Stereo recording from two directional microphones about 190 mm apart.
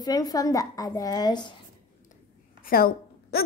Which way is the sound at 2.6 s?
50° left (ahead or behind).